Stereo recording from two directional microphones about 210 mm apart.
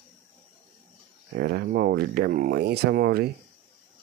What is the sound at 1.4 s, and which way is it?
Speech, 50° right (ahead or behind).